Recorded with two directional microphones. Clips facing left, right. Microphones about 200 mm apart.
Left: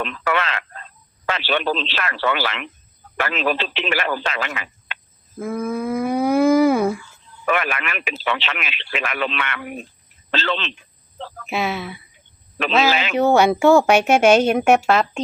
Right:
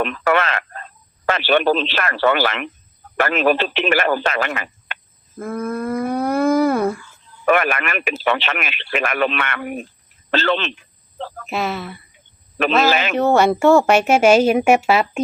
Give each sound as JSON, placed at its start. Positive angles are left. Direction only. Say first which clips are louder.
{"t": 0.0, "sound": "speech", "louder": "right 5 dB", "side_deg": -50}
{"t": 5.4, "sound": "a sound", "louder": "even", "side_deg": 0}
{"t": 7.4, "sound": "speech", "louder": "right 5 dB", "side_deg": -50}
{"t": 11.4, "sound": "a woman's voice", "louder": "even", "side_deg": 0}
{"t": 12.9, "sound": "speech", "louder": "right 3 dB", "side_deg": -50}
{"t": 13.1, "sound": "a woman's voice", "louder": "left 1 dB", "side_deg": 0}